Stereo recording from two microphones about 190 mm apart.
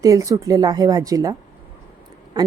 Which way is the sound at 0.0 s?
20° right (ahead or behind).